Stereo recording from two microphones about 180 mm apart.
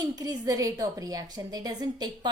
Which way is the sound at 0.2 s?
20° right (ahead or behind).